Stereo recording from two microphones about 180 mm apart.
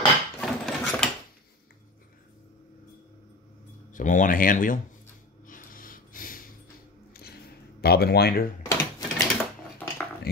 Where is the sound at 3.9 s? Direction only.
50° left (ahead or behind).